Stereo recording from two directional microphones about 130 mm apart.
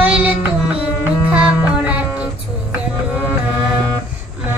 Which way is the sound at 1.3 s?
10° right (ahead or behind).